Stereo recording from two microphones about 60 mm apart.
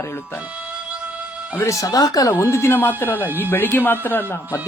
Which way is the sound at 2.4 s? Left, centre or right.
Left.